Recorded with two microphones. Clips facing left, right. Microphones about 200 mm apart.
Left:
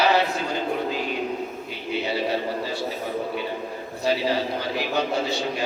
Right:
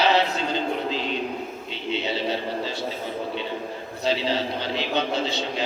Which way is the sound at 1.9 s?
25° right (ahead or behind).